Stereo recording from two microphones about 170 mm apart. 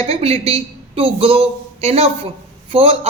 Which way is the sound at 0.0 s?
35° right (ahead or behind).